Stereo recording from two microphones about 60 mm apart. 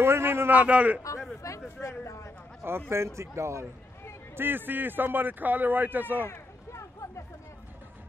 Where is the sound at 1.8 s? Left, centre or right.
Left.